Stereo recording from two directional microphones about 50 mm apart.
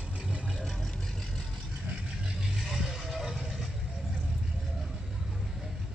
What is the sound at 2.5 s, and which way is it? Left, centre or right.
Vehicle, centre.